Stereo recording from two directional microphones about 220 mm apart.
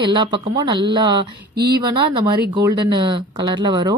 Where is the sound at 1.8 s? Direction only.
20° right (ahead or behind).